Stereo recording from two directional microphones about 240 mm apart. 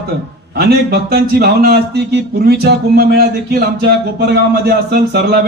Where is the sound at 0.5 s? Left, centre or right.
Right.